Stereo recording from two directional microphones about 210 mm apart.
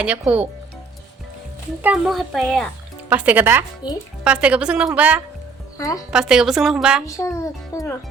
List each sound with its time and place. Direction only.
0.0 s speech: 5° right (ahead or behind)
1.8 s speech: 5° right (ahead or behind)
3.8 s speech: 20° left (ahead or behind)
4.2 s speech: 5° right (ahead or behind)
5.7 s a woman's voice: 15° left (ahead or behind)
6.1 s speech: centre (ahead or behind)
7.0 s a child's voice: 15° left (ahead or behind)